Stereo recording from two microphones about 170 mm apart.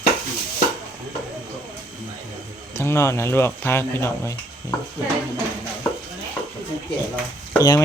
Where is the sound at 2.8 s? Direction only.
15° left (ahead or behind).